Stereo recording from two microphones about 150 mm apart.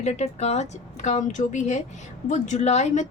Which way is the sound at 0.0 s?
50° left (ahead or behind).